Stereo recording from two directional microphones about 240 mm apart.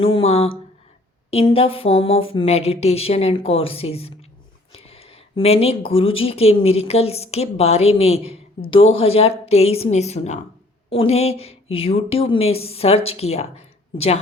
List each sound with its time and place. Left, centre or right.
0.0 s speech: left